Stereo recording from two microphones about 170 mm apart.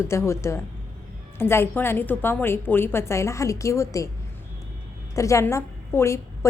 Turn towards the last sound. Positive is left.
turn(degrees=15)  # may be behind; listen again after turning